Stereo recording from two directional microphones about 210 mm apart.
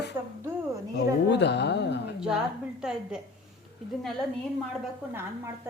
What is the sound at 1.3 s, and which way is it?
Speech, 55° left (ahead or behind).